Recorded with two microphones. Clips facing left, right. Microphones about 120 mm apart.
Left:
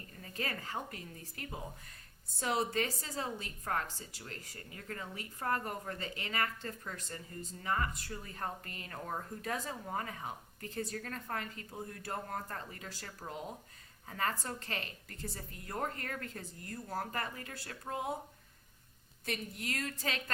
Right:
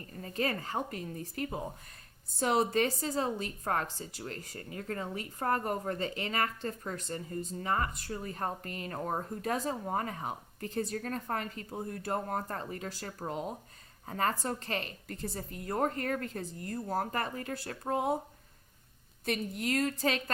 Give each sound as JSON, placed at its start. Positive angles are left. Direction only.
{"t": 0.2, "sound": "a woman's voice", "side_deg": -35}
{"t": 19.3, "sound": "a woman's voice", "side_deg": -30}